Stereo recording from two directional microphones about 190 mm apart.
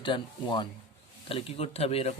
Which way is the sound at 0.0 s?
25° left (ahead or behind).